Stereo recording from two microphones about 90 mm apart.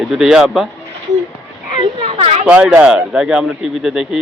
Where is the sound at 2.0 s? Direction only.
90° right.